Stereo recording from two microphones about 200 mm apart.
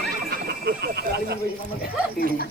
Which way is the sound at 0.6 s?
55° right (ahead or behind).